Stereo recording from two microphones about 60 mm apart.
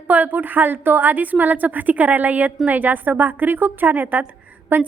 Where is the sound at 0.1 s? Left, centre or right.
Right.